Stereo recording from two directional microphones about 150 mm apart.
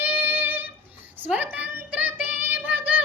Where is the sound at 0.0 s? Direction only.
10° right (ahead or behind).